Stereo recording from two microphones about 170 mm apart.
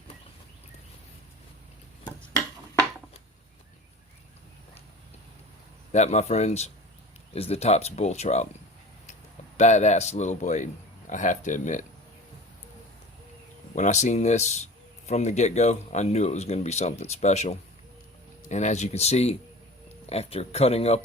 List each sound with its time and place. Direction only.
5.9 s a man's voice: 40° left (ahead or behind)
9.6 s a man's voice: 40° left (ahead or behind)
13.7 s a man's voice: 45° left (ahead or behind)